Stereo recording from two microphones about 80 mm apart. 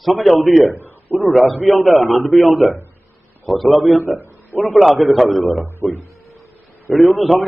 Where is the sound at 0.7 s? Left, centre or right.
Right.